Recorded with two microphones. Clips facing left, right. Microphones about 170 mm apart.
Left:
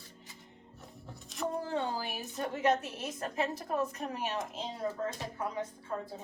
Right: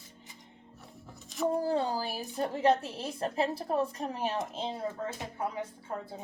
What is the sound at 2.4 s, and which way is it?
A woman's voice, 30° right (ahead or behind).